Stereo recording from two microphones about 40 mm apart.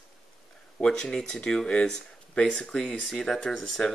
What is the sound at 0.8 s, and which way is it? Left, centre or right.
Speech, centre.